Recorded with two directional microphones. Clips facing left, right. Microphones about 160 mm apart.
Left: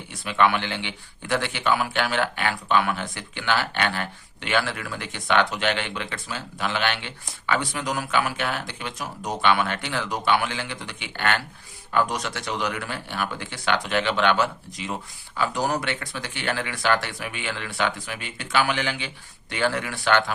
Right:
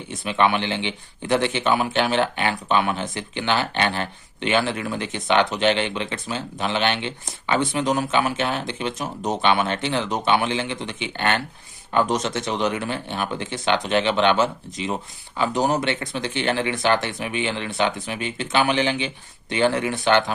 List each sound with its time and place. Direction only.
0.1 s speech: 20° right (ahead or behind)